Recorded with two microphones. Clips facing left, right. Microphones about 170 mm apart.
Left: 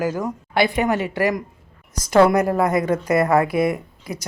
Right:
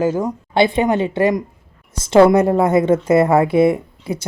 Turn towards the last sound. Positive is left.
turn(degrees=-30)  # may be behind; listen again after turning